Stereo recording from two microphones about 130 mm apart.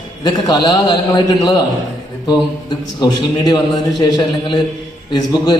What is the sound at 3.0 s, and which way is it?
A man's voice, 35° left (ahead or behind).